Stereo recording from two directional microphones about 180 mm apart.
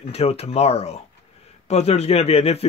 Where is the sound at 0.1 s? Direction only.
35° left (ahead or behind).